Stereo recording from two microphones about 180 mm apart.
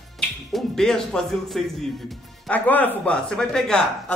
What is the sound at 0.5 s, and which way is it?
Speech, centre (ahead or behind).